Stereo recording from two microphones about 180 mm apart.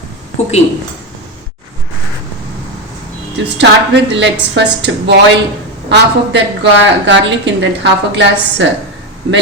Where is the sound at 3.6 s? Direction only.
75° right (ahead or behind).